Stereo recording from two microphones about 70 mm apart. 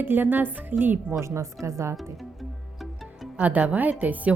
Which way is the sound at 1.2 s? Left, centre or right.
Right.